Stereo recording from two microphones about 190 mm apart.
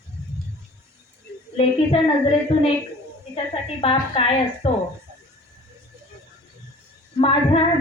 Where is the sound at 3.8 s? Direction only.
30° left (ahead or behind).